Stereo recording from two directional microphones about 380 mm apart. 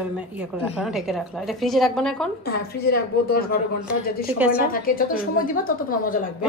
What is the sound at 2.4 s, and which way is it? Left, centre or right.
A woman's voice, left.